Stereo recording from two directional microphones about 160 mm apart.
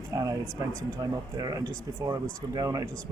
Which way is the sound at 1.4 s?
25° right (ahead or behind).